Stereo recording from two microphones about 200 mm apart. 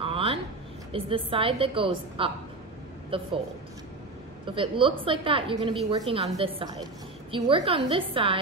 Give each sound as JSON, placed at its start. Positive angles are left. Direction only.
{"t": 0.0, "sound": "a sound", "side_deg": -25}
{"t": 0.9, "sound": "a woman's voice", "side_deg": -30}
{"t": 4.5, "sound": "a woman's voice", "side_deg": -25}